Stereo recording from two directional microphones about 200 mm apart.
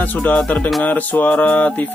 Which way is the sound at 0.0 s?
10° left (ahead or behind).